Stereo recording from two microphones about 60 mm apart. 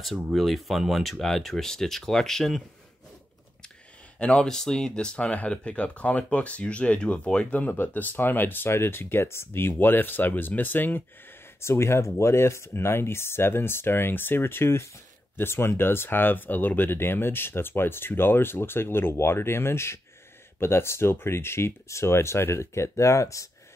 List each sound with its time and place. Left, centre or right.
0.3 s speech: centre
4.2 s speech: centre; by 11.1 s left
11.6 s speech: left